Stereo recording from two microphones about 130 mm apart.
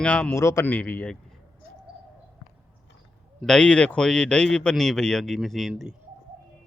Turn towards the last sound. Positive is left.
turn(degrees=-5)  # may be behind; listen again after turning